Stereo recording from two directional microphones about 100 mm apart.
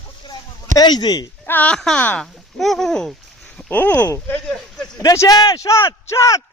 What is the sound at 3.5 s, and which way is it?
Speech, 15° left (ahead or behind).